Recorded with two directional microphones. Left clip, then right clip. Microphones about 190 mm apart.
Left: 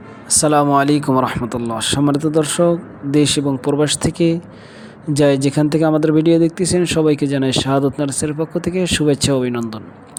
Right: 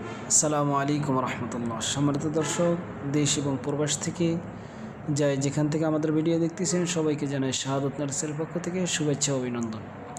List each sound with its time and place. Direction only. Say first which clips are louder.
0.3 s speech: left 11 dB; 45° left (ahead or behind)